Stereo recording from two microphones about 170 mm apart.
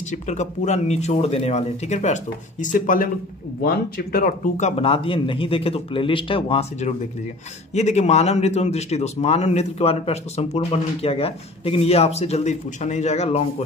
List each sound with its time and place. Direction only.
0.1 s speech: 45° left (ahead or behind)